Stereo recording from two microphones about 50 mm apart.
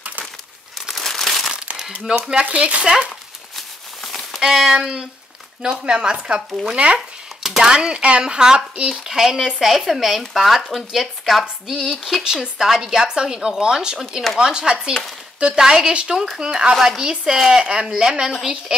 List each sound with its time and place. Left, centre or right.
0.8 s crumpling: centre
2.0 s a woman's voice: centre
2.4 s speech: right
3.5 s a sound: centre
4.4 s a woman's voice: centre
9.0 s a woman's voice: centre